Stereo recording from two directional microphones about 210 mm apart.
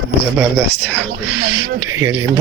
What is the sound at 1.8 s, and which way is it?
Speech, 15° right (ahead or behind).